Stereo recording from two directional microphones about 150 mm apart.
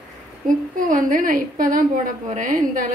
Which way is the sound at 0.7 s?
60° right (ahead or behind).